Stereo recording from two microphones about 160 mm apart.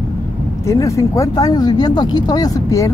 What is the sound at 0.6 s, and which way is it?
Speech, 20° left (ahead or behind).